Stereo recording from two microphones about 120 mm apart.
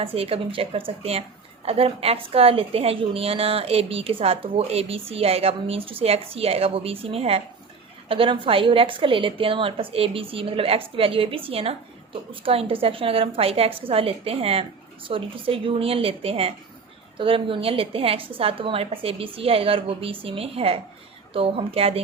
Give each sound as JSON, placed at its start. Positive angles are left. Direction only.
{"t": 0.0, "sound": "a woman's voice", "side_deg": -50}